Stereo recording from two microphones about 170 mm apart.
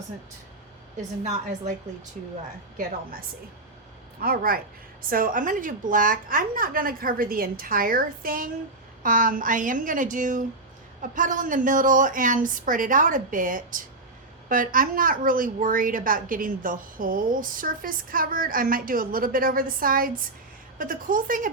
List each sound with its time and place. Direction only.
1.2 s speech: 45° right (ahead or behind)
2.7 s a woman's voice: 55° right (ahead or behind)